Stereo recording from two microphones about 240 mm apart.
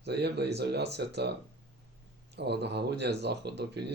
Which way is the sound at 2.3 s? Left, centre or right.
Right.